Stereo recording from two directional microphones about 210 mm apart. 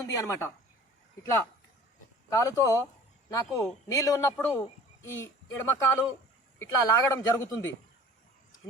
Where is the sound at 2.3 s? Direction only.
15° left (ahead or behind).